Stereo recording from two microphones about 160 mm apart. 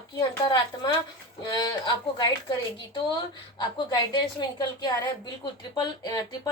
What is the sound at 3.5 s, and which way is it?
Speech, 25° left (ahead or behind).